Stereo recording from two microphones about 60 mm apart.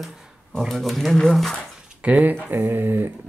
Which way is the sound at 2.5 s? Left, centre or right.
Right.